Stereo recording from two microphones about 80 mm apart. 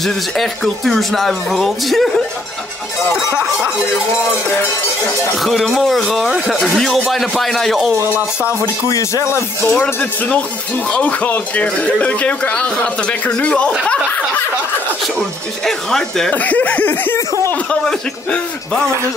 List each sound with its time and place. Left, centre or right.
0.0 s speech: centre
5.4 s speech: centre
8.5 s speech: left
9.7 s speech: left
15.6 s speech: centre
16.3 s speech: centre
17.6 s speech: centre